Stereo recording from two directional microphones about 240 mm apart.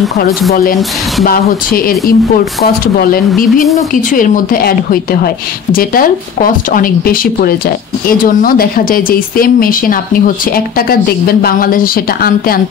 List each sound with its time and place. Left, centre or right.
1.2 s speech: left